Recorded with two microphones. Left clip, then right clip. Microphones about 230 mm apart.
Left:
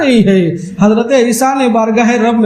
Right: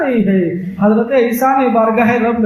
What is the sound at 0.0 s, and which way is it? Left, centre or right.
A man's voice, left.